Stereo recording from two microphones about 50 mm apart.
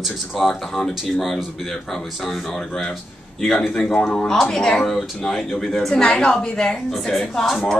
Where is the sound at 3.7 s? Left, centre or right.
Centre.